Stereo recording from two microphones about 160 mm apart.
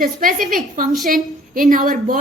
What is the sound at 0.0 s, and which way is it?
A woman's voice, 60° right (ahead or behind).